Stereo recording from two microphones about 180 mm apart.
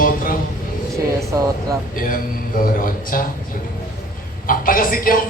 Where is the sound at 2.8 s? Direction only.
50° left (ahead or behind).